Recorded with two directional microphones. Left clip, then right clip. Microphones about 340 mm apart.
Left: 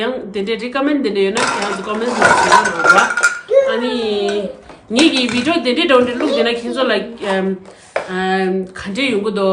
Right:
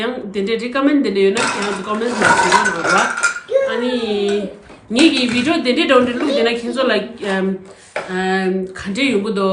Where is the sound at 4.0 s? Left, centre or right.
Centre.